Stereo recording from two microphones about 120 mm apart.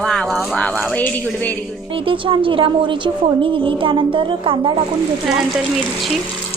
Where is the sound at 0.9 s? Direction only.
15° left (ahead or behind).